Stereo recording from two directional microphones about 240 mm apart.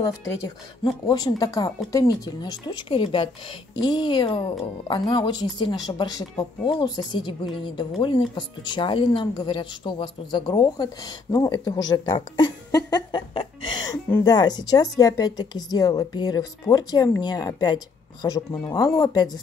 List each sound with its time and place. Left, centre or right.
1.0 s a woman's voice: centre